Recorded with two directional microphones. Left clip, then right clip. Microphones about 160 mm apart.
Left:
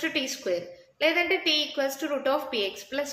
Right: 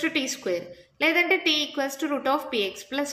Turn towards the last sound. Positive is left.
turn(degrees=-35)  # may be behind; listen again after turning